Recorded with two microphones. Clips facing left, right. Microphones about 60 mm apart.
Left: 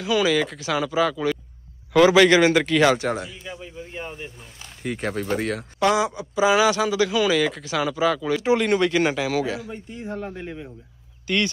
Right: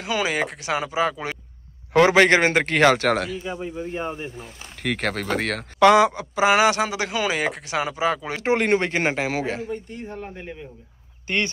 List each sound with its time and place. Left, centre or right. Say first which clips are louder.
0.0 s speech: left 3 dB; right
2.0 s speech: left 1 dB; right
3.0 s speech: right 5 dB; right
3.4 s speech: right 7 dB; right
4.8 s speech: right 1 dB; right
6.3 s speech: left 1 dB; right
10.1 s speech: left 3 dB; centre
11.2 s speech: left 1 dB; right